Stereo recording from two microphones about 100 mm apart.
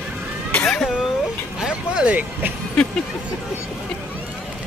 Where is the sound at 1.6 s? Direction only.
10° right (ahead or behind).